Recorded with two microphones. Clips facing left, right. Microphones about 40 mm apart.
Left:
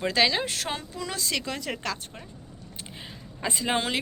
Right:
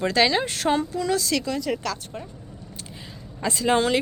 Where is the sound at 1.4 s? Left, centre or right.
Left.